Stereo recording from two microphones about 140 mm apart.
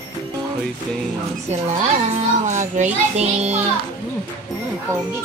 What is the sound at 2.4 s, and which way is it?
A child's voice, 60° right (ahead or behind).